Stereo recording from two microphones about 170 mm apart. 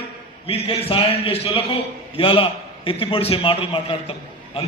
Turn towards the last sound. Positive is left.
turn(degrees=35)  # may be behind; listen again after turning